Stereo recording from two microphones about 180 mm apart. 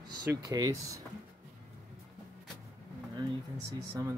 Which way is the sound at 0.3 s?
20° right (ahead or behind).